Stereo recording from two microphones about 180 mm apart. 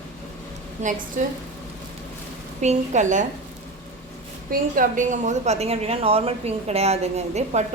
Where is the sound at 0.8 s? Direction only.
40° right (ahead or behind).